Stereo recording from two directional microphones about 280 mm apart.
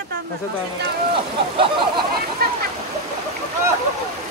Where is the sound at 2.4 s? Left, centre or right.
Right.